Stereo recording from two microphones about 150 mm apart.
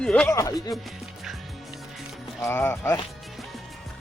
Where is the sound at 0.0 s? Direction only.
5° left (ahead or behind).